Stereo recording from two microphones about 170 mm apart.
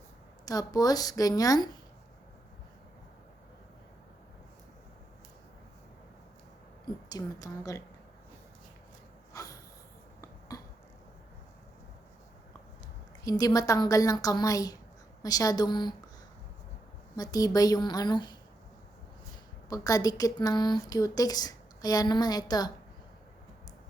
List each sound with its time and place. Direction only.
0.4 s a woman's voice: 20° left (ahead or behind)
6.8 s a woman's voice: 25° left (ahead or behind)
9.3 s a sound: 20° left (ahead or behind)
13.2 s a woman's voice: 20° left (ahead or behind)
17.2 s a woman's voice: 20° left (ahead or behind)
19.7 s a woman's voice: 20° left (ahead or behind)